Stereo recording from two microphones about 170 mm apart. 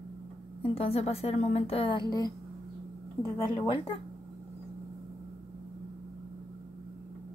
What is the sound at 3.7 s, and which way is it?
Speech, 30° left (ahead or behind).